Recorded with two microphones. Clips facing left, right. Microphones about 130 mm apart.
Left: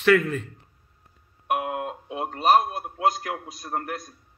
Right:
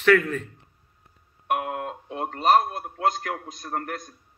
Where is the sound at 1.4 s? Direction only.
20° left (ahead or behind).